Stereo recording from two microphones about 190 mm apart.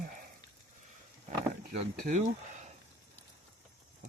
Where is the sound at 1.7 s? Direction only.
40° right (ahead or behind).